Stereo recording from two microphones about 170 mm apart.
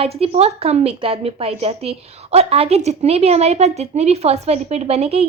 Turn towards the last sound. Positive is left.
turn(degrees=-35)  # may be behind; listen again after turning